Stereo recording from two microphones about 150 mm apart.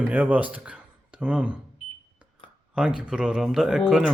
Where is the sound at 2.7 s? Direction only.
5° right (ahead or behind).